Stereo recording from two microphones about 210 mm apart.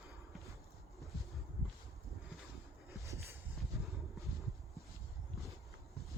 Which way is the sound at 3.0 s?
15° right (ahead or behind).